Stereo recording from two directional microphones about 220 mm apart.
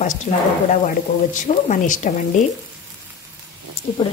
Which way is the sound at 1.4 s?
35° left (ahead or behind).